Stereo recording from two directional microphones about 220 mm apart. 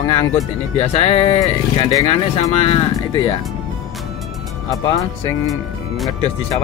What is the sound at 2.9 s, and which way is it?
Speech, 15° left (ahead or behind).